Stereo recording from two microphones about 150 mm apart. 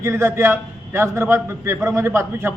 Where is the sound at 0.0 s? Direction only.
20° right (ahead or behind).